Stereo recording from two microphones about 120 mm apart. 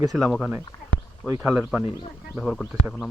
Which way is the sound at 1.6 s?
10° right (ahead or behind).